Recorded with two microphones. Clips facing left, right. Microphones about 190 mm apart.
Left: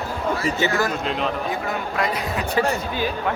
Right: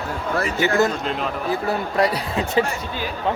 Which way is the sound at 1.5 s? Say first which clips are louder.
Right 3 dB; 35° right (ahead or behind).